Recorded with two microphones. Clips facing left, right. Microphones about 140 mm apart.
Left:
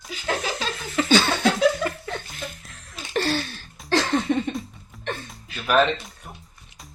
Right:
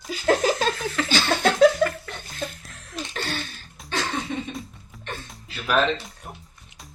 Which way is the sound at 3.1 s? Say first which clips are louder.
Left 9 dB; 85° left.